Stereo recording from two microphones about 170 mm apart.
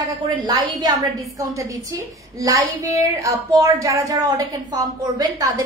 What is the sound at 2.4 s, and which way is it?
A woman's voice, 20° right (ahead or behind).